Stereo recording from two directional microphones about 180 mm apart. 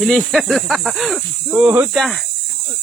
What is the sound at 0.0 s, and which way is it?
Speech, centre (ahead or behind).